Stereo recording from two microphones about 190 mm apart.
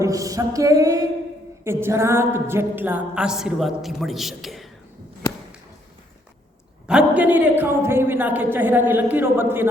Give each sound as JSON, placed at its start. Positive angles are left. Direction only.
{"t": 0.0, "sound": "music", "side_deg": -15}
{"t": 1.6, "sound": "a sound", "side_deg": -15}
{"t": 6.8, "sound": "a woman's voice", "side_deg": -5}